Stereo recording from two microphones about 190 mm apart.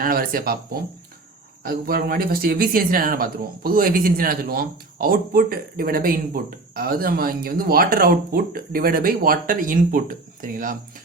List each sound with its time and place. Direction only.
0.0 s speech: 50° right (ahead or behind)
1.6 s speech: 50° right (ahead or behind)